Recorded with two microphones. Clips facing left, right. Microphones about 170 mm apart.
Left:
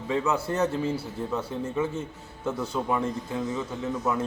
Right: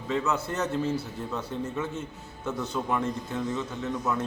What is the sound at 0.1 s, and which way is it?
Speech, 10° left (ahead or behind).